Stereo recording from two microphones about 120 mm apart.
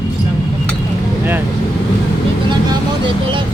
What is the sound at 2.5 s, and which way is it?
Vehicle, 40° right (ahead or behind).